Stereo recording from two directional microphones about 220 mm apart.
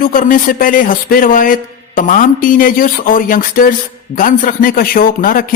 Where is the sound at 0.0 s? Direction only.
40° left (ahead or behind).